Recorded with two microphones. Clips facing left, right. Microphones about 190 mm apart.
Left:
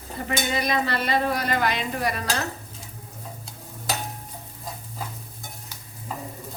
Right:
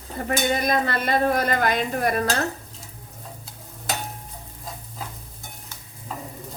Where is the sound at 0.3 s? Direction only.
50° right (ahead or behind).